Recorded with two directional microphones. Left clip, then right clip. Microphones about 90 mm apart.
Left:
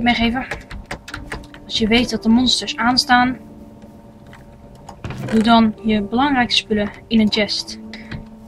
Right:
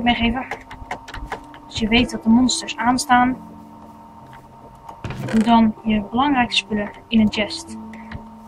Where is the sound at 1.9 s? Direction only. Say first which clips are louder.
Even; 35° left (ahead or behind).